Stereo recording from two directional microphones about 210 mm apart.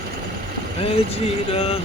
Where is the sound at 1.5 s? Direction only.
25° left (ahead or behind).